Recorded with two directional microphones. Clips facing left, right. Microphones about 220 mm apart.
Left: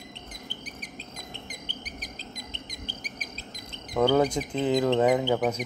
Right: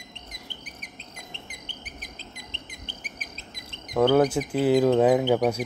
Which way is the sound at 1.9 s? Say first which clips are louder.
Left 2 dB; 35° left (ahead or behind).